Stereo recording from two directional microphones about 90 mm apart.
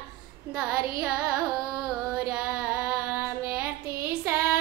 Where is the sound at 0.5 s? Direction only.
10° right (ahead or behind).